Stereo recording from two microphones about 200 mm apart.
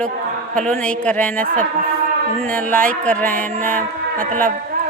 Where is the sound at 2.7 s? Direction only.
5° left (ahead or behind).